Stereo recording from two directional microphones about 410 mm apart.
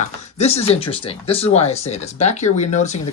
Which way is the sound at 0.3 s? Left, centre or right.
Centre.